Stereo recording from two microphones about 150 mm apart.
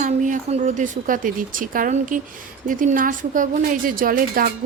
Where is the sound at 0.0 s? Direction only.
55° right (ahead or behind).